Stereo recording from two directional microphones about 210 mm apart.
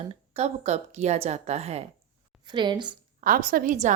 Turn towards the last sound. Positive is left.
turn(degrees=-40)  # may be behind; listen again after turning